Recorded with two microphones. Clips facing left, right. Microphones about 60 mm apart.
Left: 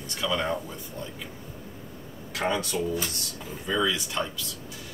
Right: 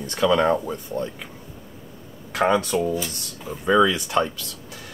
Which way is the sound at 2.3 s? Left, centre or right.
Right.